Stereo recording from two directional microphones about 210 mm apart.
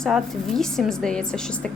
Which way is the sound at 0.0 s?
Centre (ahead or behind).